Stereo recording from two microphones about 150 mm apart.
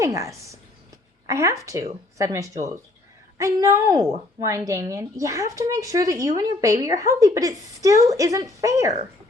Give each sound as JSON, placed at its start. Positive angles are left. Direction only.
{"t": 0.0, "sound": "a woman's voice", "side_deg": -20}